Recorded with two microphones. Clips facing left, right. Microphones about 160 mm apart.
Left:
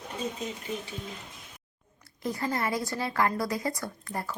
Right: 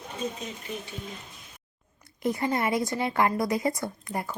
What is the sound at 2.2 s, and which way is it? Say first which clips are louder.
A woman's voice: right 4 dB; 20° right (ahead or behind).